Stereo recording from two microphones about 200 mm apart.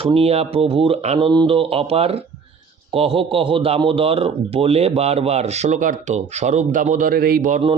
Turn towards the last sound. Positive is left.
turn(degrees=-45)  # may be behind; listen again after turning